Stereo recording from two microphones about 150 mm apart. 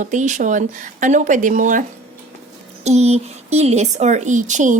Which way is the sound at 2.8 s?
50° right (ahead or behind).